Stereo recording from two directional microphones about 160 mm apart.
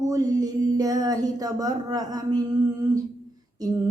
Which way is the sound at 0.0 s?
25° right (ahead or behind).